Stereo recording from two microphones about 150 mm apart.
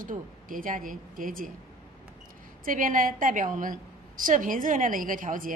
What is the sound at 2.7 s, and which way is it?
A woman's voice, 65° right (ahead or behind).